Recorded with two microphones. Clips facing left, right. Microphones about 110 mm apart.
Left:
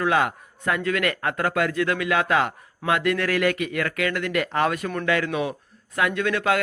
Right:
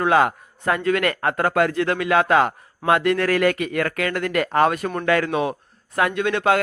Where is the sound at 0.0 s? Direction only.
35° right (ahead or behind).